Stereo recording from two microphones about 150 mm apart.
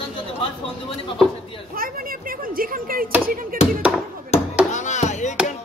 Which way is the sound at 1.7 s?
75° right (ahead or behind).